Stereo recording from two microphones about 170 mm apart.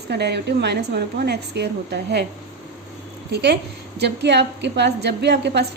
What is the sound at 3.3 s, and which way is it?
A woman's voice, 75° right (ahead or behind).